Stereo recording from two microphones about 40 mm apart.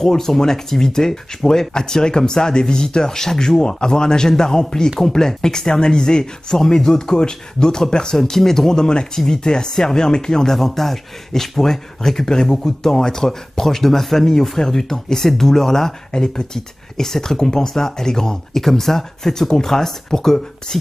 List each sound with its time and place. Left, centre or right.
0.0 s speech: centre